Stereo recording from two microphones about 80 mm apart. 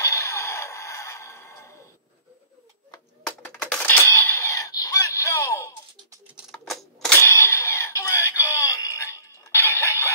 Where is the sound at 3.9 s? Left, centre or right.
Left.